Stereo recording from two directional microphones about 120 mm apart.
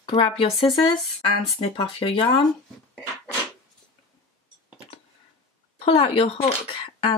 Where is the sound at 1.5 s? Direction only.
45° left (ahead or behind).